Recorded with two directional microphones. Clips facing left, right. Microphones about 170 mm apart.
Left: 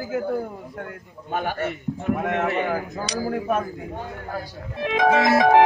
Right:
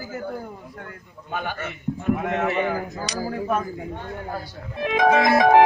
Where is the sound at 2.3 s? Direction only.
55° left (ahead or behind).